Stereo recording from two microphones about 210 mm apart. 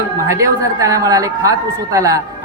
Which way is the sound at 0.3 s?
15° right (ahead or behind).